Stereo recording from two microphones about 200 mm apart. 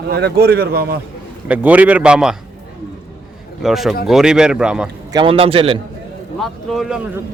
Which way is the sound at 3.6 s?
Centre (ahead or behind).